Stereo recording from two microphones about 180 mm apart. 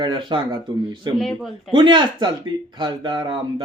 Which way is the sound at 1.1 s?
Centre (ahead or behind).